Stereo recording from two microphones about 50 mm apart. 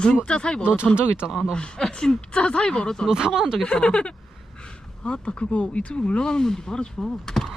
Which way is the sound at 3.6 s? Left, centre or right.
Centre.